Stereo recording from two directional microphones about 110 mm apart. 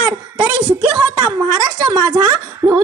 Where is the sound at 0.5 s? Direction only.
10° right (ahead or behind).